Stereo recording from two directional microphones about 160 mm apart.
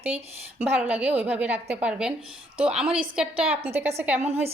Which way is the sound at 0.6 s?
10° right (ahead or behind).